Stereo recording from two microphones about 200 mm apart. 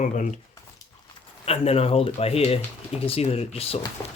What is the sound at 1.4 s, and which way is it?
Speech, 30° left (ahead or behind).